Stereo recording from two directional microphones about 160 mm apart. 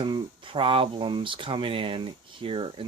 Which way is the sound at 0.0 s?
30° right (ahead or behind).